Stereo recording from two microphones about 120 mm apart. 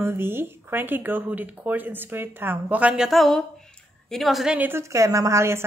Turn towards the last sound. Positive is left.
turn(degrees=-25)  # may be behind; listen again after turning